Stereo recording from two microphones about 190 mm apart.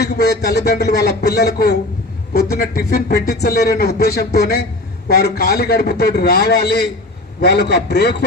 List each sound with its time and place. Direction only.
0.0 s a man's voice: 60° left (ahead or behind)